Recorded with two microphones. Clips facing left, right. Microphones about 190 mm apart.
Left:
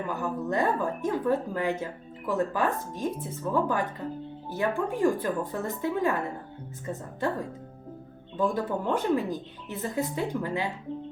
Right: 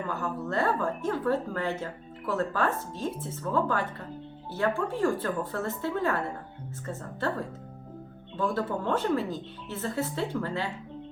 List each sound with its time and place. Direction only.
0.1 s a woman's voice: 15° left (ahead or behind)